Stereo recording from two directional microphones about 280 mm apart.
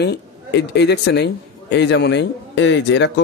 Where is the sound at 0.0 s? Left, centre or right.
Left.